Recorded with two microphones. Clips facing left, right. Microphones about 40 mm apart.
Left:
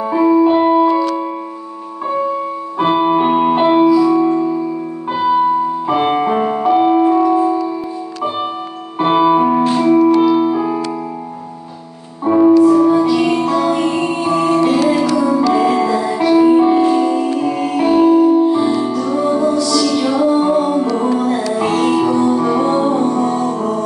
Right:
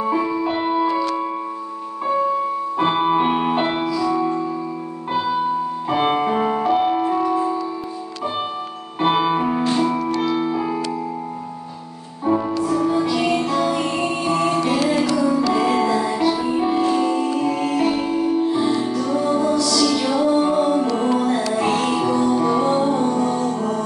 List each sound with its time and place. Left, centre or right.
0.0 s music: centre
2.8 s music: centre
5.9 s music: centre
9.0 s music: centre
12.3 s music: left
12.6 s music: centre
15.4 s music: centre
16.2 s music: centre
21.3 s music: centre